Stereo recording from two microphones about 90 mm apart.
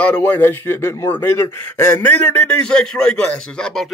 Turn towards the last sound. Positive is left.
turn(degrees=10)  # may be behind; listen again after turning